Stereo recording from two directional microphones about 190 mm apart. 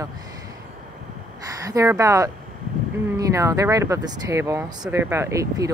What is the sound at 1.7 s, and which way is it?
Speech, 15° right (ahead or behind).